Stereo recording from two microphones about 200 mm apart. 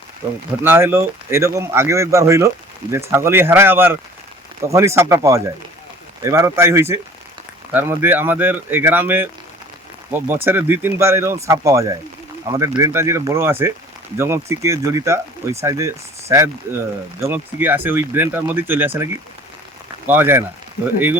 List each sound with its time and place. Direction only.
0.6 s speech: 10° right (ahead or behind)
17.2 s speech: 10° right (ahead or behind)
20.1 s speech: 10° right (ahead or behind)